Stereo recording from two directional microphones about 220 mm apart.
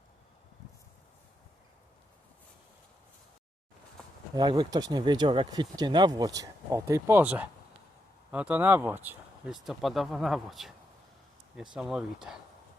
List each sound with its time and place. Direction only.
4.4 s speech: 20° right (ahead or behind); by 12.4 s 5° right (ahead or behind)